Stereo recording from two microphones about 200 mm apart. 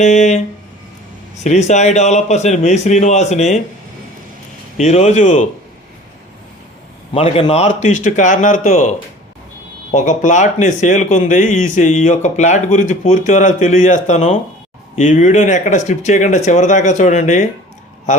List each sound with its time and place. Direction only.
0.0 s speech: 35° left (ahead or behind)
1.5 s speech: 35° left (ahead or behind)
4.8 s speech: 35° left (ahead or behind)
7.1 s speech: 30° left (ahead or behind)